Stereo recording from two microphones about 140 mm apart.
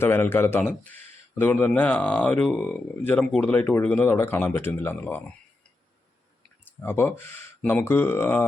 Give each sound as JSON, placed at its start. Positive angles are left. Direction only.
{"t": 0.0, "sound": "speech", "side_deg": 15}
{"t": 6.8, "sound": "speech", "side_deg": 15}